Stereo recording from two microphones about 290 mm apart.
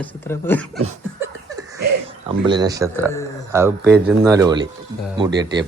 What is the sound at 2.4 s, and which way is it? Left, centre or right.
Speech, centre.